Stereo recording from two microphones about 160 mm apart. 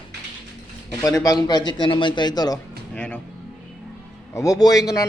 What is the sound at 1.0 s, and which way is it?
A man's voice, 20° left (ahead or behind).